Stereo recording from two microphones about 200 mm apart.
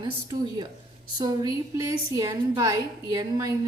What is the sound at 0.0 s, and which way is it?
A woman's voice, 20° right (ahead or behind).